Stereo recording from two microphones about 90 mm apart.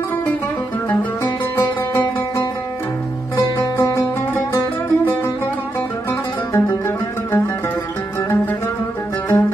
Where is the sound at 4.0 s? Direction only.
25° left (ahead or behind).